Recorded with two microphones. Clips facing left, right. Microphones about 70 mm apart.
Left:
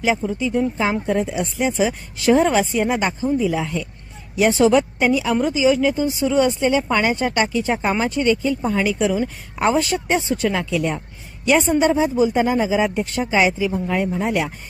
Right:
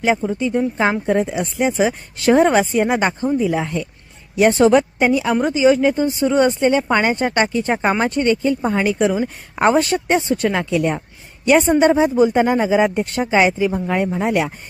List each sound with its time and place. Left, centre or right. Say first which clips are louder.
0.3 s speech: right 1 dB; right